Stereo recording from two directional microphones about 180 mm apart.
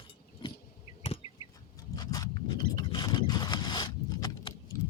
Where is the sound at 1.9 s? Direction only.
20° left (ahead or behind).